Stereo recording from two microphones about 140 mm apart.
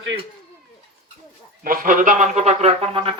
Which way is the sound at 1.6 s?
85° right.